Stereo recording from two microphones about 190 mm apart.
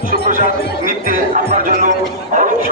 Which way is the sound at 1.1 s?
45° right (ahead or behind).